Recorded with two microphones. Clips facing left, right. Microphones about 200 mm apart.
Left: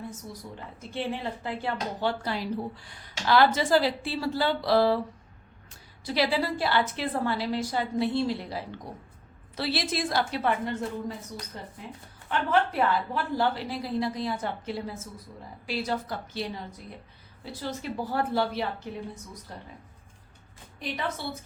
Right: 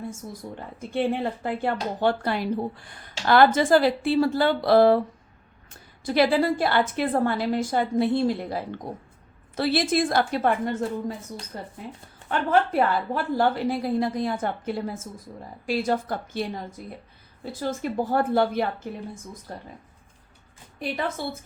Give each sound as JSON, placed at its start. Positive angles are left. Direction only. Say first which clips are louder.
{"t": 0.4, "sound": "a woman's voice", "louder": "right 5 dB", "side_deg": -30}
{"t": 0.8, "sound": "speech", "louder": "right 7 dB", "side_deg": -55}